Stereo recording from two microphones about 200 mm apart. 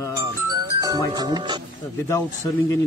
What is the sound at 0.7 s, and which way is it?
Speech, 15° right (ahead or behind).